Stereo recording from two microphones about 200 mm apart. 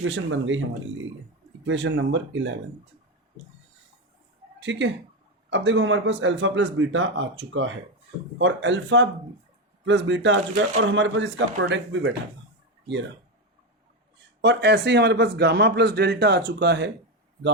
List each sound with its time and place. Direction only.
0.0 s a man's voice: 70° right (ahead or behind)
1.6 s a man's voice: 65° right (ahead or behind)
4.6 s a man's voice: 65° right (ahead or behind)
14.4 s a man's voice: 60° right (ahead or behind)